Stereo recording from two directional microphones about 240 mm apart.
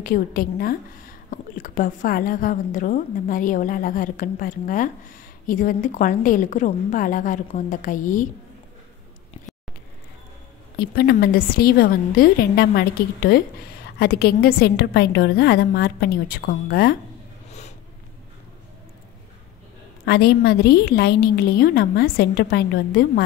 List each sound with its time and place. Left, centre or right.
0.0 s a woman's voice: left
10.8 s a woman's voice: left
17.5 s a sound: left
20.1 s a woman's voice: left